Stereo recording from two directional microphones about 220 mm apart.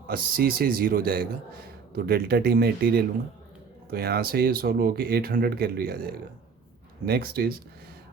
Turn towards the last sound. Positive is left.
turn(degrees=-45)  # may be behind; listen again after turning